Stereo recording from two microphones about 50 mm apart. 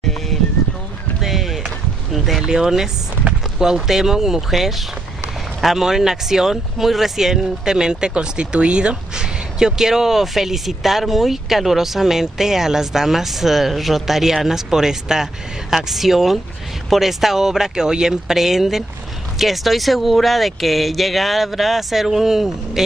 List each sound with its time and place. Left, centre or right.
1.2 s rowboat: centre
2.1 s a sound: centre
2.4 s speech: centre